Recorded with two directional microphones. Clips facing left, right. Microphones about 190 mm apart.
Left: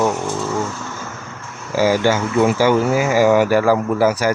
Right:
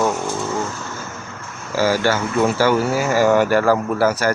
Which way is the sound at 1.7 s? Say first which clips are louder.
Left 2 dB; 15° left (ahead or behind).